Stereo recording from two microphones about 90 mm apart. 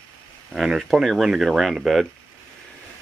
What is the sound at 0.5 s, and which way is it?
Speech, 5° right (ahead or behind).